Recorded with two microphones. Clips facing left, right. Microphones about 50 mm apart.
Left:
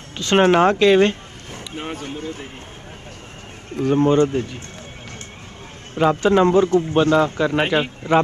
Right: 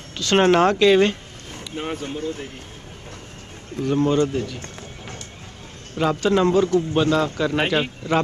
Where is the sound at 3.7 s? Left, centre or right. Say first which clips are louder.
Left 3 dB; left.